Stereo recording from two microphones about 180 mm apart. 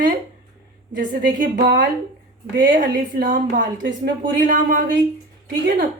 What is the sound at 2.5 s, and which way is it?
A woman's voice, 85° right.